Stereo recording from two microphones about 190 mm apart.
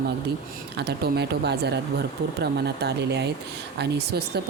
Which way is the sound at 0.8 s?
60° right (ahead or behind).